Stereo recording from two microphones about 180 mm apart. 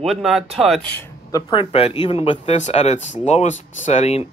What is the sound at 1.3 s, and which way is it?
Speech, 30° left (ahead or behind).